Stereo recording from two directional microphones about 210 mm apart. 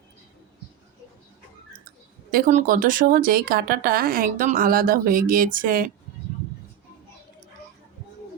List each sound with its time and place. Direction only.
2.3 s speech: 40° right (ahead or behind)